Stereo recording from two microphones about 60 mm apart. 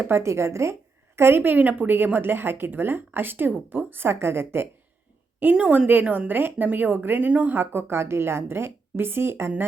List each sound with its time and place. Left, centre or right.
0.0 s a woman's voice: right
7.5 s a woman's voice: right